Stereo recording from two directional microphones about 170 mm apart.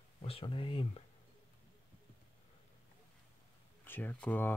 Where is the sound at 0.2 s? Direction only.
35° left (ahead or behind).